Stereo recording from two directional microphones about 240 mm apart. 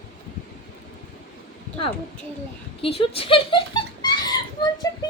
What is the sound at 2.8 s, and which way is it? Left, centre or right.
Speech, left.